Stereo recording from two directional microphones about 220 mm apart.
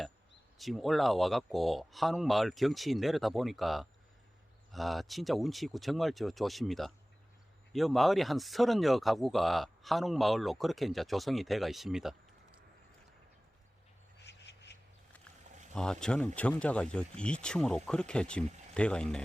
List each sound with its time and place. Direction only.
0.6 s speech: centre (ahead or behind)
14.2 s a sound: 50° left (ahead or behind)
15.7 s speech: 5° left (ahead or behind)